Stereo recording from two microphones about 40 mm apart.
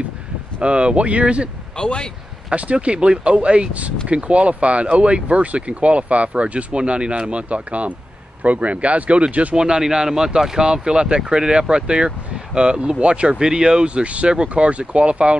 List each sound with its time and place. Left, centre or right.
0.6 s speech: right
1.8 s speech: left
2.5 s speech: right
9.6 s speech: centre